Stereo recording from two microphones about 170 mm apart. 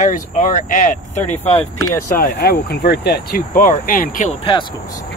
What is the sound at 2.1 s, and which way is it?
Speech, 60° left (ahead or behind).